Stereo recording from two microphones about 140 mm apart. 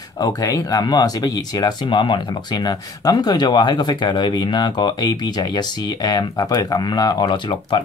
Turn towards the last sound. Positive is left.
turn(degrees=35)  # may be behind; listen again after turning